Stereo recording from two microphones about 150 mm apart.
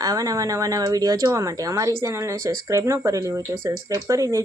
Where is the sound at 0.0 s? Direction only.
25° right (ahead or behind).